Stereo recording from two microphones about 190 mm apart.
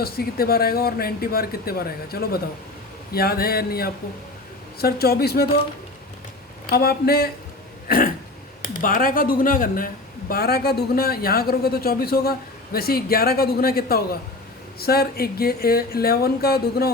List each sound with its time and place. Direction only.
0.0 s speech: 55° left (ahead or behind)
6.7 s speech: 55° left (ahead or behind)
7.9 s throat clearing: 50° left (ahead or behind)
8.6 s speech: 45° left (ahead or behind)